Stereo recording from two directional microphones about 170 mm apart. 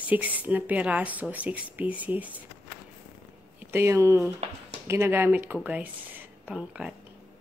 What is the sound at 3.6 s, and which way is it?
Speech, 15° right (ahead or behind).